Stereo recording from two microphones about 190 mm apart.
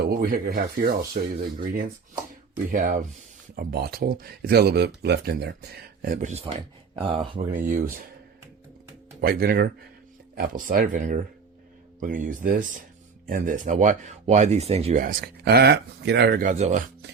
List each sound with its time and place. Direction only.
0.0 s speech: 50° right (ahead or behind); by 7.2 s 25° right (ahead or behind)
7.3 s speech: 40° right (ahead or behind)
9.2 s speech: 55° right (ahead or behind); by 15.0 s 35° right (ahead or behind)
15.0 s speech: 50° right (ahead or behind)